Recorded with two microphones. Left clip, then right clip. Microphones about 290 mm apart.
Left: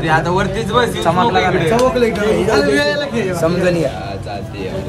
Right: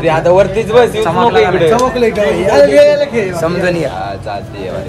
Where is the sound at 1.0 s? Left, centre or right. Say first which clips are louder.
Right 4 dB; centre.